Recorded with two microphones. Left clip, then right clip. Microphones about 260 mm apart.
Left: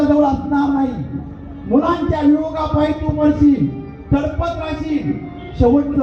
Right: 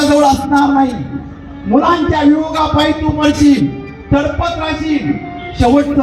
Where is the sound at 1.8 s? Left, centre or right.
Right.